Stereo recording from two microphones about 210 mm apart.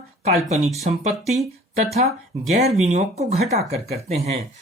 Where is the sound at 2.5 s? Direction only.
30° right (ahead or behind).